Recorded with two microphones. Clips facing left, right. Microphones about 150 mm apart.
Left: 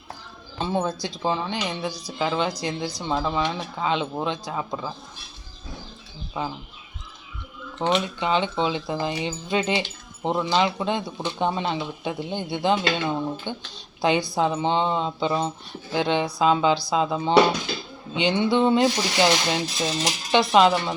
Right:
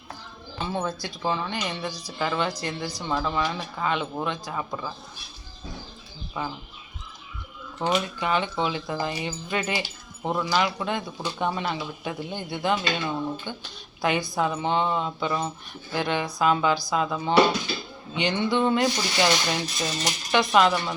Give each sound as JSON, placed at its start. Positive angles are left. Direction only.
{"t": 0.6, "sound": "speech", "side_deg": 25}
{"t": 6.4, "sound": "speech", "side_deg": 15}
{"t": 7.8, "sound": "speech", "side_deg": 20}
{"t": 18.5, "sound": "speech", "side_deg": 20}